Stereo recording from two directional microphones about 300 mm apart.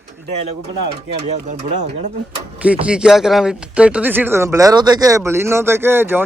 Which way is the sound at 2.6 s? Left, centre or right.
Centre.